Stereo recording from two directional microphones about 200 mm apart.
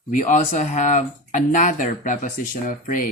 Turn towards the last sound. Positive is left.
turn(degrees=45)  # may be behind; listen again after turning